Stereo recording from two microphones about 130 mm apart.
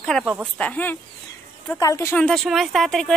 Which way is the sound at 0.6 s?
10° left (ahead or behind).